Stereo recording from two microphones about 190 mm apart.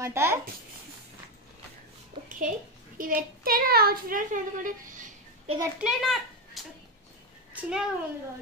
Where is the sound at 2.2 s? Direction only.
45° right (ahead or behind).